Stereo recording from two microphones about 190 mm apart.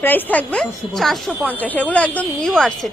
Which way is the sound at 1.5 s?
10° left (ahead or behind).